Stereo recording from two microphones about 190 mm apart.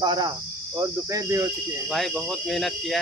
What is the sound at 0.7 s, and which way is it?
Speech, 15° right (ahead or behind).